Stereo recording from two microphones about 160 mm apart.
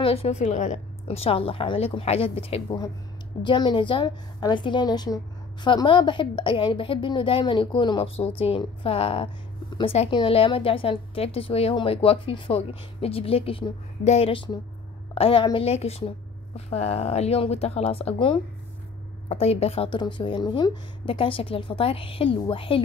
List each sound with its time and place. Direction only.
0.0 s a woman's voice: 40° left (ahead or behind)